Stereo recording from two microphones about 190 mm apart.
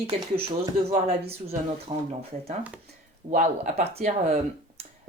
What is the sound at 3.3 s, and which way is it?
Speech, 35° right (ahead or behind).